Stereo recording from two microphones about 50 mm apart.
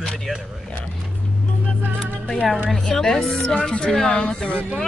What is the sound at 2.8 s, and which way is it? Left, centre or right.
A woman's voice, centre.